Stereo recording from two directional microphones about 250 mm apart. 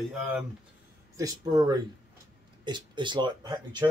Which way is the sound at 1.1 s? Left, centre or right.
Centre.